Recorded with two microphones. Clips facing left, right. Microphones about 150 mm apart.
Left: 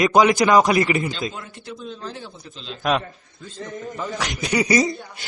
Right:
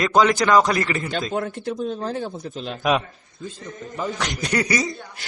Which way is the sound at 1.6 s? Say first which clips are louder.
Right 8 dB; 45° right (ahead or behind).